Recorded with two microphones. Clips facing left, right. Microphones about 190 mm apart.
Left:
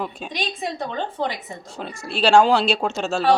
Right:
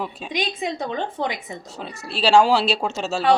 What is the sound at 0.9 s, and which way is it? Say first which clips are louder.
Speech: even; 15° right (ahead or behind).